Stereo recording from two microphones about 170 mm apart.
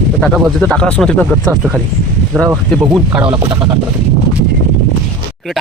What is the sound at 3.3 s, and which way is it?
Speech, 30° right (ahead or behind).